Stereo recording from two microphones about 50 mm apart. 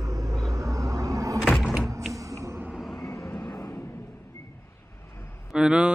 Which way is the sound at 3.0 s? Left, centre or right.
Left.